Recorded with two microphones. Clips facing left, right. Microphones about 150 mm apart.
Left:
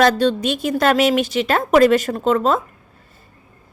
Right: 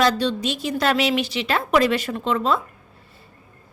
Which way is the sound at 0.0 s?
50° left (ahead or behind).